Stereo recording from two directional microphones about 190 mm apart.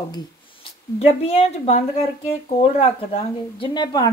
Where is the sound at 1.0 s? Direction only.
30° left (ahead or behind).